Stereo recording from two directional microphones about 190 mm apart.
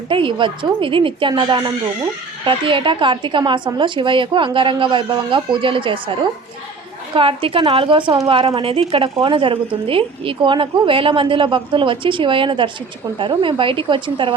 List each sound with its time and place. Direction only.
0.1 s a woman's voice: 25° right (ahead or behind)